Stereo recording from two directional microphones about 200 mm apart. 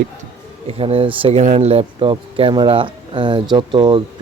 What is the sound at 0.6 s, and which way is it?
Speech, 30° right (ahead or behind).